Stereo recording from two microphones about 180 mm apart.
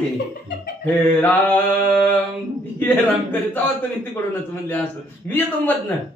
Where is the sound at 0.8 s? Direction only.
10° left (ahead or behind).